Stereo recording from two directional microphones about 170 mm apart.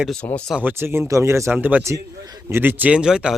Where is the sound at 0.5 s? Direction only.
10° right (ahead or behind).